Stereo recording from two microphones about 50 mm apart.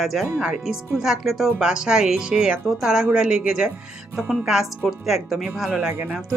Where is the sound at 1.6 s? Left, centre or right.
Centre.